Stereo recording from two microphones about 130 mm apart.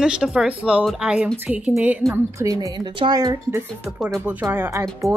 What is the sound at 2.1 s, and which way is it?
A woman's voice, 25° right (ahead or behind).